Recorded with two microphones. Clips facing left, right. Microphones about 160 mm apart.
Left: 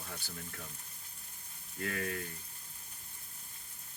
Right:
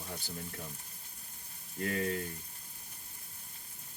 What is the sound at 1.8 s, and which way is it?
Frying, 25° right (ahead or behind).